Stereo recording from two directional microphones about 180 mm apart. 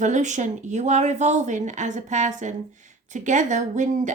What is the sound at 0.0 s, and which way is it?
A woman's voice, 40° right (ahead or behind).